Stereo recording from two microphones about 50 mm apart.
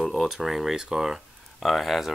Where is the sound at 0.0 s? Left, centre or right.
Centre.